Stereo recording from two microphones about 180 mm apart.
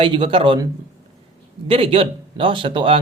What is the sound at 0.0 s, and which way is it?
Speech, 30° right (ahead or behind).